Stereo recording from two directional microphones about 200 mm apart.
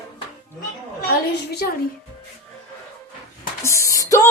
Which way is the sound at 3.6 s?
15° left (ahead or behind).